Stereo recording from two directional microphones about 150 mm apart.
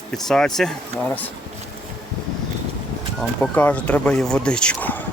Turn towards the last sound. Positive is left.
turn(degrees=10)  # may be behind; listen again after turning